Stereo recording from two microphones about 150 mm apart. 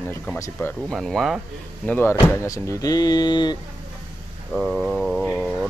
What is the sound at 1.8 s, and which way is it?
Speech, 15° left (ahead or behind).